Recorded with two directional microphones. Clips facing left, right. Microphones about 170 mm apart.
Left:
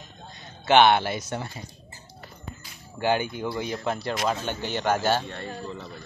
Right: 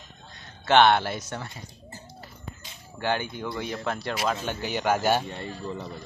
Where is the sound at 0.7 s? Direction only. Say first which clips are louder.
Left 1 dB; 5° left (ahead or behind).